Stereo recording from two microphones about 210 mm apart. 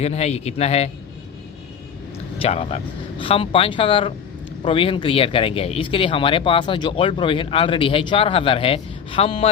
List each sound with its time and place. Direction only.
0.0 s a man's voice: 30° left (ahead or behind)
2.4 s speech: 30° left (ahead or behind)